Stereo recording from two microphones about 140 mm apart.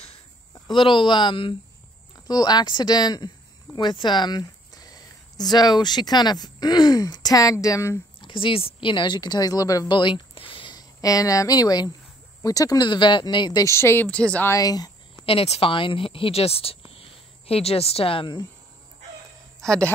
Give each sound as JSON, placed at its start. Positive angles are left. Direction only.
{"t": 0.7, "sound": "speech", "side_deg": 35}
{"t": 8.2, "sound": "speech", "side_deg": 35}
{"t": 14.5, "sound": "speech", "side_deg": 25}
{"t": 15.2, "sound": "speech", "side_deg": 45}